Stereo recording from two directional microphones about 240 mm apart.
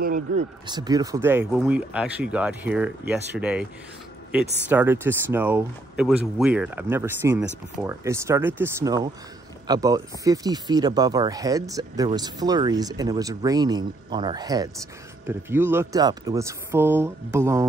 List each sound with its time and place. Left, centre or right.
0.0 s speech: right
0.7 s speech: centre
4.6 s speech: centre